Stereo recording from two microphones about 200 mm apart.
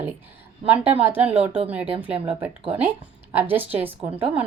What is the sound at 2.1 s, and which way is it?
Speech, 30° right (ahead or behind).